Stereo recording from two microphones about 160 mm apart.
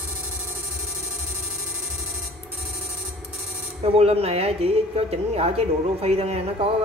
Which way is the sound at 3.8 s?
40° right (ahead or behind).